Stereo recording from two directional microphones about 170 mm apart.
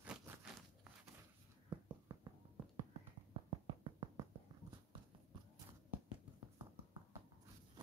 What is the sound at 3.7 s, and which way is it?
Music, 30° right (ahead or behind).